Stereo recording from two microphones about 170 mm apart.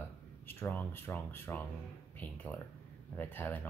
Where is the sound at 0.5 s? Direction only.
10° left (ahead or behind).